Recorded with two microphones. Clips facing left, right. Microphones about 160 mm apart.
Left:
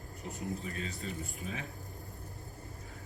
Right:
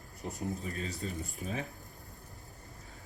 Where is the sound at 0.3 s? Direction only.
40° right (ahead or behind).